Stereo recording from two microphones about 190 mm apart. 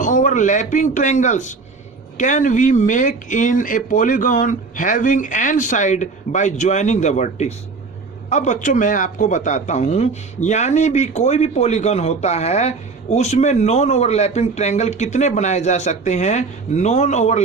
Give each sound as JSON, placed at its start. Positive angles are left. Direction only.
{"t": 0.0, "sound": "a man's voice", "side_deg": 40}